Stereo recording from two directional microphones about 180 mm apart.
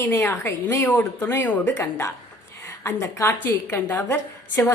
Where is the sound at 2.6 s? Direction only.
15° left (ahead or behind).